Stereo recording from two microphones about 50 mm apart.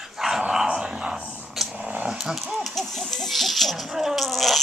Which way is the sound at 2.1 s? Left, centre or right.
Centre.